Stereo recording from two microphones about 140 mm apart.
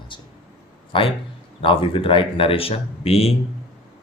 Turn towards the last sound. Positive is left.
turn(degrees=45)  # may be behind; listen again after turning